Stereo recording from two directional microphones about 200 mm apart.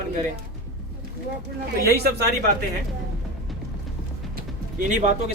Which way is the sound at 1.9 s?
55° right (ahead or behind).